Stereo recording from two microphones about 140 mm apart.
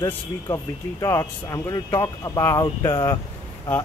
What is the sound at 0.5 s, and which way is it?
Speech, 15° left (ahead or behind).